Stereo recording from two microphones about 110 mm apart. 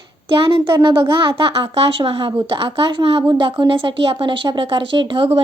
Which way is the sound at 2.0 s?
50° right (ahead or behind).